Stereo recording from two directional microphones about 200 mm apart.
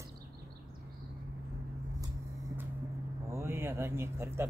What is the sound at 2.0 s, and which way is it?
Vehicle, 15° right (ahead or behind).